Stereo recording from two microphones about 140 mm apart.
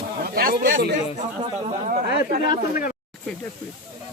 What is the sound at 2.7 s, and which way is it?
Speech, 90° left.